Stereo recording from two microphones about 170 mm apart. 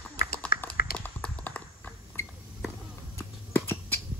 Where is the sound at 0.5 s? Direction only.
60° left (ahead or behind).